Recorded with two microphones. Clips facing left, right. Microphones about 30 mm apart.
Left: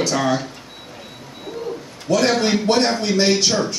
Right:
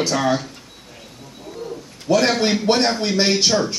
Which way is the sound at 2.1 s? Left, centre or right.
Centre.